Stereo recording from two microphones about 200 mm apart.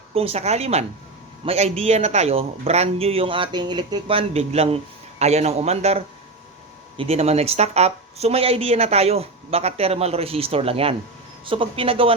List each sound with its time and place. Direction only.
0.1 s a man's voice: 30° right (ahead or behind)